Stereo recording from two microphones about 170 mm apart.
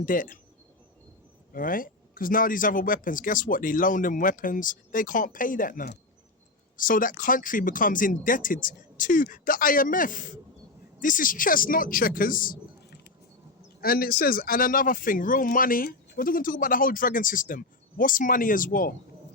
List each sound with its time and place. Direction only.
0.0 s a man's voice: 50° left (ahead or behind)
1.5 s a man's voice: 55° left (ahead or behind)